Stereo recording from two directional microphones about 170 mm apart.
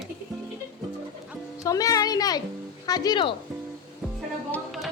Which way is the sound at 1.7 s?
20° left (ahead or behind).